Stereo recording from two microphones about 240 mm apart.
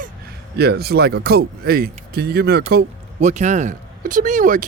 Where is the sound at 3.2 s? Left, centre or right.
Right.